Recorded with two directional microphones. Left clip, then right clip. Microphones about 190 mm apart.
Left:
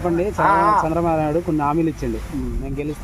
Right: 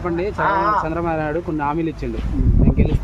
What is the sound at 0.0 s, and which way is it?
Speech, 45° left (ahead or behind).